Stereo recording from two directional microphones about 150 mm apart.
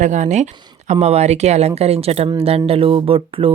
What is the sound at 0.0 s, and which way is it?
Speech, 55° right (ahead or behind).